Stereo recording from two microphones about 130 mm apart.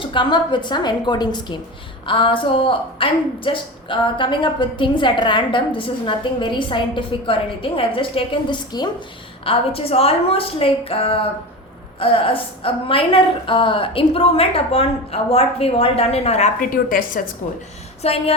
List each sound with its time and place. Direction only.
0.0 s a woman's voice: 40° left (ahead or behind)
9.4 s a woman's voice: 45° left (ahead or behind)
16.6 s a woman's voice: 90° left
18.0 s a woman's voice: 50° left (ahead or behind)